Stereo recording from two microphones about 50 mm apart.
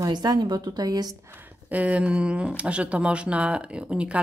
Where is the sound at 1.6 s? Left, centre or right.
Right.